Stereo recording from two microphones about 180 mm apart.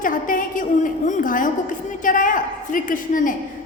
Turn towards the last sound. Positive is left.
turn(degrees=50)  # may be behind; listen again after turning